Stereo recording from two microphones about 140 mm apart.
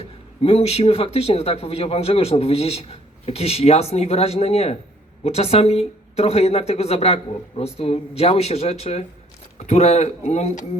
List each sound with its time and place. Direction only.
0.4 s speech: 45° left (ahead or behind)